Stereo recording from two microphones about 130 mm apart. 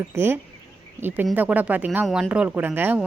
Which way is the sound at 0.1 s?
20° right (ahead or behind).